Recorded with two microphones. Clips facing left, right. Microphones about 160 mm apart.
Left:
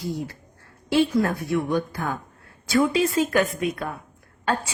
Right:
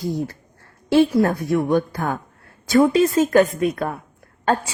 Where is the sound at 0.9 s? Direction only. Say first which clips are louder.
Right 5 dB; 45° right (ahead or behind).